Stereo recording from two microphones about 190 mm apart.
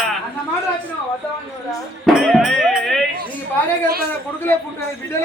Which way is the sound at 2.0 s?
Centre (ahead or behind).